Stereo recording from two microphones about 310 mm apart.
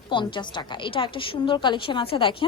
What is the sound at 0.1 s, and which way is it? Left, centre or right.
Speech, centre.